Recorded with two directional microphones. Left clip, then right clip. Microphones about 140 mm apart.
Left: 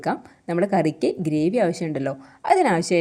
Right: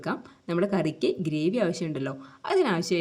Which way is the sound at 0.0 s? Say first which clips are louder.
Left 7 dB; 30° left (ahead or behind).